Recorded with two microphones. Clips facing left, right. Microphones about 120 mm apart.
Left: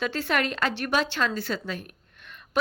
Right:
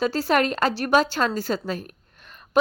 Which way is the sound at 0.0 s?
35° right (ahead or behind).